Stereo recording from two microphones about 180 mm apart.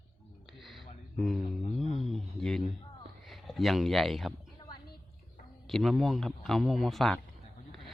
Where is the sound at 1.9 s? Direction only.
Centre (ahead or behind).